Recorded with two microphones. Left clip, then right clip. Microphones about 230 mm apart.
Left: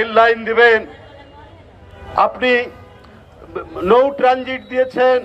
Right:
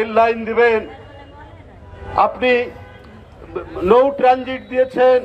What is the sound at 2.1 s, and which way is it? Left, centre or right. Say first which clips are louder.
A man's voice: even; left.